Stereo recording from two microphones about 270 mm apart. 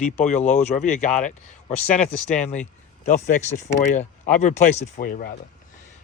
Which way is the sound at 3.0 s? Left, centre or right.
Left.